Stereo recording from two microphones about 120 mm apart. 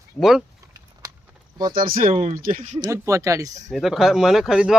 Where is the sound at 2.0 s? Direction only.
90° right.